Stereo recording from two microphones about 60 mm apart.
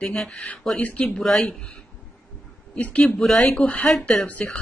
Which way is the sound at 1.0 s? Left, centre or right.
Centre.